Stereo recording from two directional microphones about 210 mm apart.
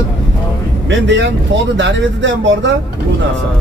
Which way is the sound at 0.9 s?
60° right (ahead or behind).